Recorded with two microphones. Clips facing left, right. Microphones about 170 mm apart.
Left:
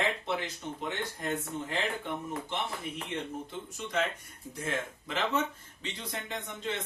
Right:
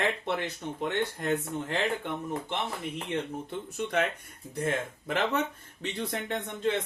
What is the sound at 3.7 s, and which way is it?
Speech, 60° right (ahead or behind).